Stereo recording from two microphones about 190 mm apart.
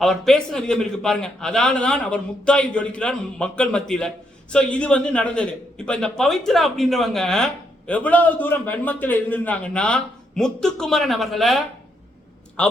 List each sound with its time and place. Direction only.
0.0 s a man's voice: centre (ahead or behind)